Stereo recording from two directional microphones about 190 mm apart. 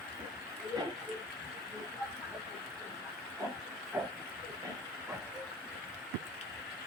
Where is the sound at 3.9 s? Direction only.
10° right (ahead or behind).